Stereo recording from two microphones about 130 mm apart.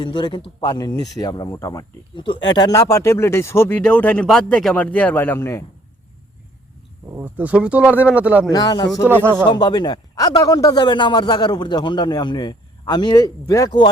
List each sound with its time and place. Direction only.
0.0 s a man's voice: 35° left (ahead or behind); by 5.6 s 20° left (ahead or behind)
7.1 s speech: 15° right (ahead or behind)
8.4 s a man's voice: 30° left (ahead or behind)
9.0 s speech: 15° right (ahead or behind)
9.4 s a man's voice: 35° left (ahead or behind)